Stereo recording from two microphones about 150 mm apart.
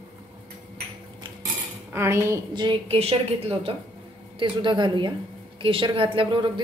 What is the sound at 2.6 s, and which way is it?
A woman's voice, 35° right (ahead or behind).